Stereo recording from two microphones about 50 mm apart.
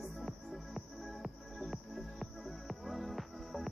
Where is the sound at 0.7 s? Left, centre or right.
Centre.